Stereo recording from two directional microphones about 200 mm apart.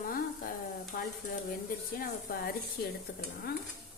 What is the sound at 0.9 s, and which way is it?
Stir, 45° left (ahead or behind).